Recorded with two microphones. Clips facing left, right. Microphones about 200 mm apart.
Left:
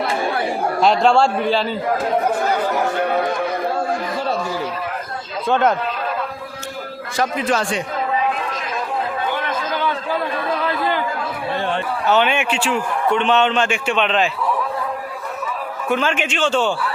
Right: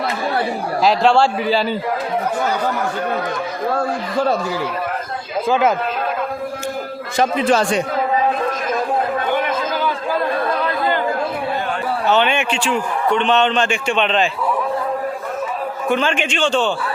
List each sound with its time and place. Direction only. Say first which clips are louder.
0.8 s a man's voice: right 1 dB; centre (ahead or behind)
5.5 s a man's voice: right 1 dB; 5° right (ahead or behind)
7.2 s a man's voice: right 4 dB; 25° right (ahead or behind)
12.0 s a man's voice: even; 5° left (ahead or behind)
15.9 s a man's voice: right 1 dB; 5° left (ahead or behind)